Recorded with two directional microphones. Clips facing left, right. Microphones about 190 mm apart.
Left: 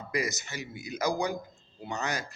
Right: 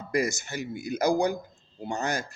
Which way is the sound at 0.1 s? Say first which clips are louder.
Right 5 dB; 50° right (ahead or behind).